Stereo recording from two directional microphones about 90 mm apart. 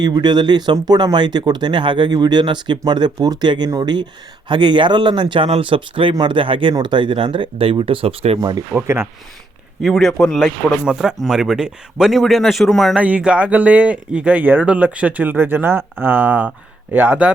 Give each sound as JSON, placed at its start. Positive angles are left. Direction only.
{"t": 0.0, "sound": "speech", "side_deg": -50}
{"t": 8.7, "sound": "speech", "side_deg": -25}
{"t": 9.8, "sound": "speech", "side_deg": 0}
{"t": 13.0, "sound": "speech", "side_deg": -15}